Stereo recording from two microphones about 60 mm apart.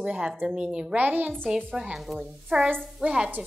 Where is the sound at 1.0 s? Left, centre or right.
Right.